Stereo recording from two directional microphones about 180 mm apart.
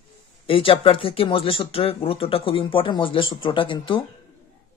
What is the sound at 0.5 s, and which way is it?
Speech, 30° left (ahead or behind).